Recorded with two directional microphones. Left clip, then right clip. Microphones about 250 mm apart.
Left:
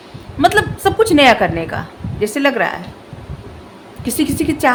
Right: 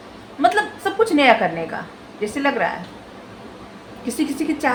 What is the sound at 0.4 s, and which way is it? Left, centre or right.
A woman's voice, left.